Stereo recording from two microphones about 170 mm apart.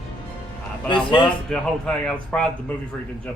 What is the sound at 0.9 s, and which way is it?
Speech, 30° left (ahead or behind).